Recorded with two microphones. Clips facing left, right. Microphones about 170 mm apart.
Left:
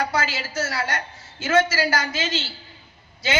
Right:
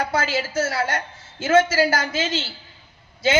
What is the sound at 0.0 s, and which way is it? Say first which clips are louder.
Speech: right 2 dB; 50° right (ahead or behind).